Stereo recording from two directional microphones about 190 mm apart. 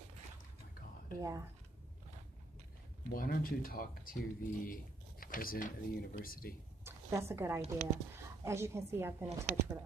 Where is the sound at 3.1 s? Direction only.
50° left (ahead or behind).